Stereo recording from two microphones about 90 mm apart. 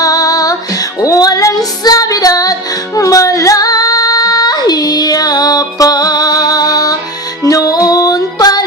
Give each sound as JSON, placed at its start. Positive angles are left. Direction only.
{"t": 0.0, "sound": "music", "side_deg": 40}